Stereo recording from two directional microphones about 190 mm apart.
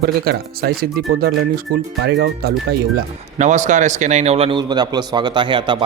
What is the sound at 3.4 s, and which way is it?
A man's voice, 40° right (ahead or behind).